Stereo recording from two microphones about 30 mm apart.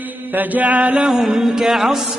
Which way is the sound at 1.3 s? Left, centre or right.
Centre.